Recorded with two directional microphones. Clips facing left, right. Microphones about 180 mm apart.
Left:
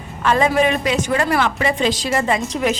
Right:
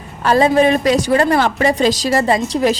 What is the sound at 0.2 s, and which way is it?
A woman's voice, 35° right (ahead or behind).